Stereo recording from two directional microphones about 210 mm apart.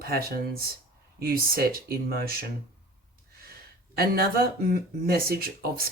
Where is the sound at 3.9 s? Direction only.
45° right (ahead or behind).